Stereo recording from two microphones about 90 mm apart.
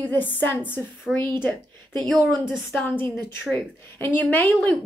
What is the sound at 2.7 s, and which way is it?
A woman's voice, 20° left (ahead or behind).